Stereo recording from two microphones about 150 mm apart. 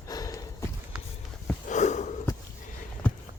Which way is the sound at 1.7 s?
55° left (ahead or behind).